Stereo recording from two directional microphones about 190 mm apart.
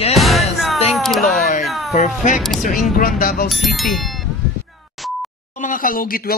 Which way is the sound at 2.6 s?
45° left (ahead or behind).